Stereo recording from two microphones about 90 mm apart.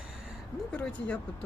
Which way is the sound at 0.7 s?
15° left (ahead or behind).